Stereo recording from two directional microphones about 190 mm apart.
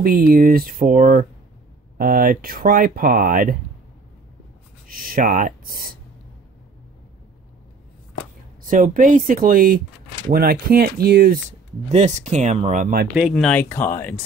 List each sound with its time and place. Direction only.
0.0 s speech: 50° right (ahead or behind)
4.8 s speech: 50° right (ahead or behind)
8.6 s speech: 45° right (ahead or behind)
11.9 s speech: 35° right (ahead or behind)
13.1 s speech: centre (ahead or behind)